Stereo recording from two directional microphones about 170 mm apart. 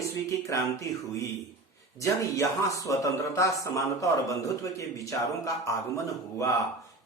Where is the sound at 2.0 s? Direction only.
20° left (ahead or behind).